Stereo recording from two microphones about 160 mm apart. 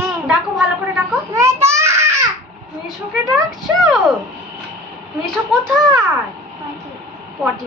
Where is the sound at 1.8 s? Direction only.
15° right (ahead or behind).